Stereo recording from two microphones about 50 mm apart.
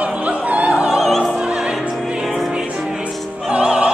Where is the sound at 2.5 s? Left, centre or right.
Centre.